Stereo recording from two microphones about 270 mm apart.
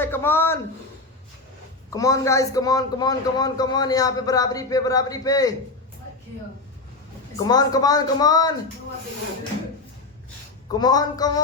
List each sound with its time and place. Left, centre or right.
0.0 s a man's voice: centre
1.9 s a man's voice: centre
7.3 s a man's voice: centre
10.8 s a man's voice: centre